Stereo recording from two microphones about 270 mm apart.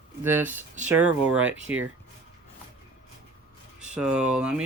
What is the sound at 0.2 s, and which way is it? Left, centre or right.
Speech, centre.